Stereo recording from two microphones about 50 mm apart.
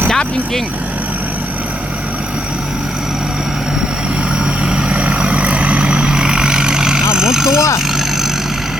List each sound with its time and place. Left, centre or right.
4.6 s vehicle: centre